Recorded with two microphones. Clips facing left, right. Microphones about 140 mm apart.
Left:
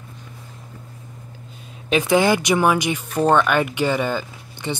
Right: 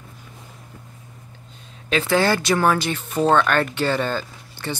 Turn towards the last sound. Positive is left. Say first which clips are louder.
# left 2 dB
turn(degrees=15)  # may be behind; listen again after turning